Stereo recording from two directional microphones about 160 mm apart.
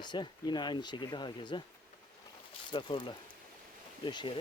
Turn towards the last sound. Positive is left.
turn(degrees=30)  # may be behind; listen again after turning